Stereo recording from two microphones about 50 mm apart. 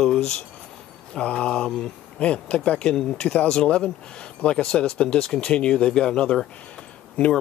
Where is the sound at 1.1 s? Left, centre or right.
Left.